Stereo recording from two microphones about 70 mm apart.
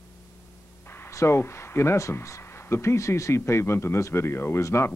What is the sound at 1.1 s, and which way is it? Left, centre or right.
Speech, left.